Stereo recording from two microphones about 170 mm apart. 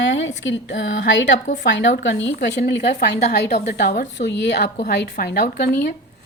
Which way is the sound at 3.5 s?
90° left.